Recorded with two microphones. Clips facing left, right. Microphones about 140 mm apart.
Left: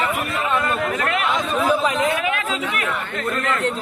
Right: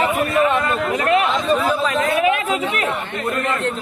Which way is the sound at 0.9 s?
25° right (ahead or behind).